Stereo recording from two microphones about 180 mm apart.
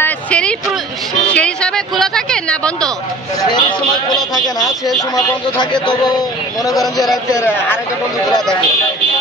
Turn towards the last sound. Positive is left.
turn(degrees=0)  # may be behind; listen again after turning